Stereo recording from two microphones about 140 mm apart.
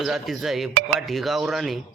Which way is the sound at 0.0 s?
Centre (ahead or behind).